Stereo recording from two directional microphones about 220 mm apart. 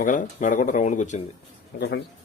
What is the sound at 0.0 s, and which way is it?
Speech, 35° left (ahead or behind).